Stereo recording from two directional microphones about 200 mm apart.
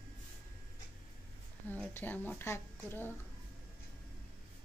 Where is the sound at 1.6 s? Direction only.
10° left (ahead or behind).